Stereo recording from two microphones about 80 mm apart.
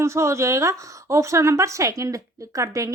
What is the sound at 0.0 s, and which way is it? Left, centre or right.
Speech, right.